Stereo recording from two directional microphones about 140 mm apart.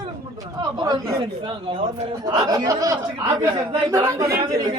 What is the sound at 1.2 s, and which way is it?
Speech, 40° right (ahead or behind).